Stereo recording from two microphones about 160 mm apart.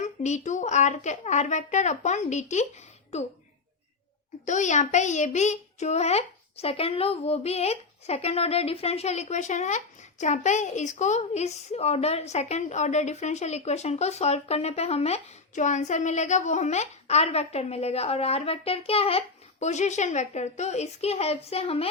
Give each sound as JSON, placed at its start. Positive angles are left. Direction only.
{"t": 0.0, "sound": "a child's voice", "side_deg": 45}
{"t": 4.4, "sound": "a child's voice", "side_deg": 50}